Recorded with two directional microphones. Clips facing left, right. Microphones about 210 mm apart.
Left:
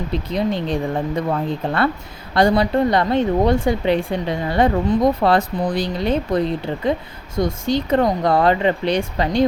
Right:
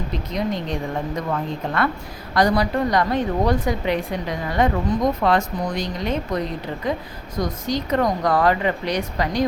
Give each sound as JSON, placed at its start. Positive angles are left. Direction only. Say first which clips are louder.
{"t": 0.3, "sound": "a woman's voice", "louder": "left 3 dB", "side_deg": 30}